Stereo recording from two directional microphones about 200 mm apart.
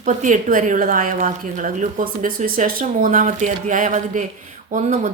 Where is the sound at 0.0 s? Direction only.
40° right (ahead or behind).